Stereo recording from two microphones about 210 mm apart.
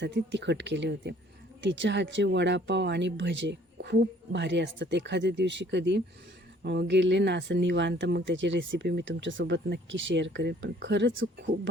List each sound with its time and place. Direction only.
0.0 s speech: 55° right (ahead or behind)